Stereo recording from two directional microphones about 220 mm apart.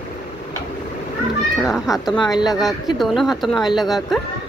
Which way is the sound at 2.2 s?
20° left (ahead or behind).